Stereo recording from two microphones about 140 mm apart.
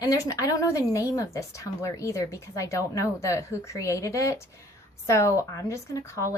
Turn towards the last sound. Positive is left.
turn(degrees=20)  # may be behind; listen again after turning